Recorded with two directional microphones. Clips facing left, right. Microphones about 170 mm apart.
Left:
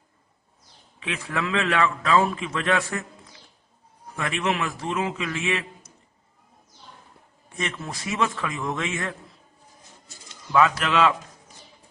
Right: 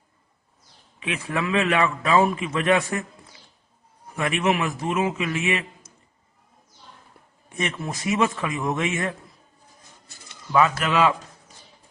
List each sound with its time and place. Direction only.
0.9 s a man's voice: 15° right (ahead or behind)
4.2 s a man's voice: 15° right (ahead or behind)
7.5 s a man's voice: 20° right (ahead or behind)
10.8 s a man's voice: 5° right (ahead or behind)